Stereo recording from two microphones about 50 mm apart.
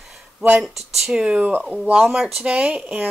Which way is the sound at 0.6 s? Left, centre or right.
Centre.